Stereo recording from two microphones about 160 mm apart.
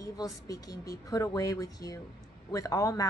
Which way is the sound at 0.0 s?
20° left (ahead or behind).